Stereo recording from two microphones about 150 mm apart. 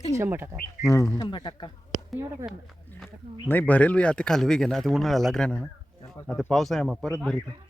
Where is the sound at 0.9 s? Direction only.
20° left (ahead or behind).